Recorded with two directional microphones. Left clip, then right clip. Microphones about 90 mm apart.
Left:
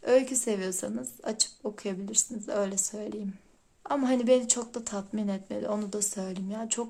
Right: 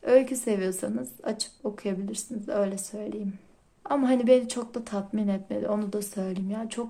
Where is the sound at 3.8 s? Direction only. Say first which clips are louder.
Right 3 dB; 20° left (ahead or behind).